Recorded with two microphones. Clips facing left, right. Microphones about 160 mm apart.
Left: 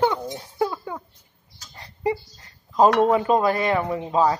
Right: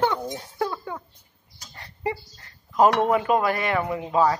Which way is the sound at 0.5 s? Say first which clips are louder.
Left 4 dB; 15° left (ahead or behind).